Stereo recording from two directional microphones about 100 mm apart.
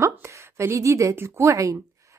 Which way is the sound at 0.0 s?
30° right (ahead or behind).